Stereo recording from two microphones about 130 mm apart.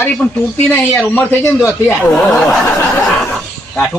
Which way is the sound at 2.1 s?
5° left (ahead or behind).